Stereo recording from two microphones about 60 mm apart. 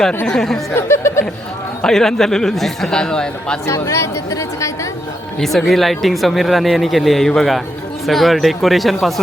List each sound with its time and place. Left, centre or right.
0.3 s speech: centre
0.7 s speech: left
1.8 s speech: centre
4.3 s a woman's voice: left
5.4 s speech: centre